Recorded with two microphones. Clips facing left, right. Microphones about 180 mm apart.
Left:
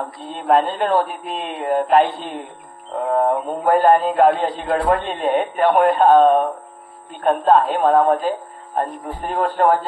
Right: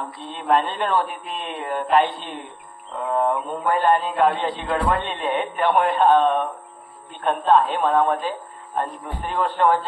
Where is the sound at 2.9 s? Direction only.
45° left (ahead or behind).